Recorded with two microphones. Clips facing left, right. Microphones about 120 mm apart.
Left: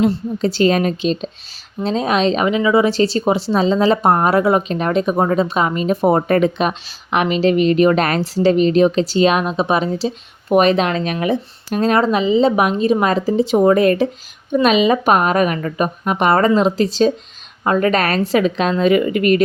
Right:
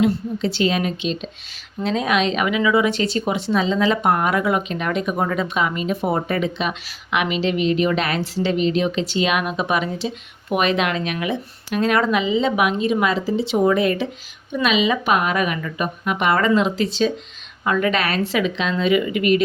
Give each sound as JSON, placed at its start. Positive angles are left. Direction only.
{"t": 0.0, "sound": "a woman's voice", "side_deg": 40}